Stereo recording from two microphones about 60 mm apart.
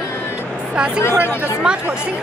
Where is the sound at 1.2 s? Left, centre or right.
Left.